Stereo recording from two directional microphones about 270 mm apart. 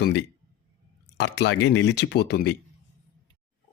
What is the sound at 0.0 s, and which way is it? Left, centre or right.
A man's voice, left.